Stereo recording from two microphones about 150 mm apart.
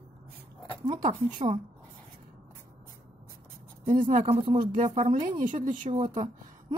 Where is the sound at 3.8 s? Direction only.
60° right (ahead or behind).